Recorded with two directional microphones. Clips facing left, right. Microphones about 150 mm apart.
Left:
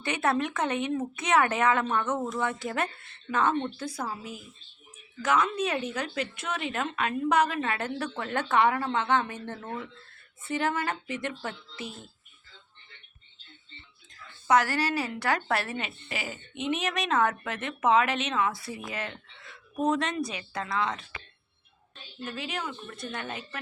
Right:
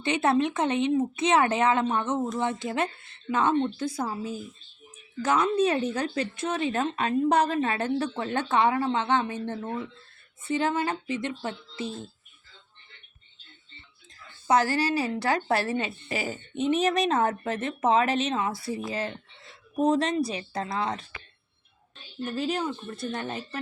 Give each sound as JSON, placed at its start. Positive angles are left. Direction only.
{"t": 0.0, "sound": "speech", "side_deg": -25}
{"t": 14.4, "sound": "speech", "side_deg": -30}
{"t": 22.2, "sound": "speech", "side_deg": -35}